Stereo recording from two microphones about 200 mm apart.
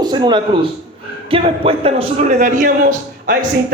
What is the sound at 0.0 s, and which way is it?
A man's voice, 20° right (ahead or behind).